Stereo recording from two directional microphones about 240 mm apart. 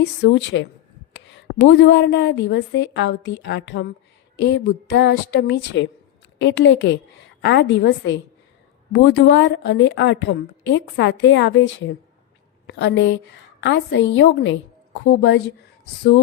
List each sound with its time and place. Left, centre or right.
0.0 s a woman's voice: left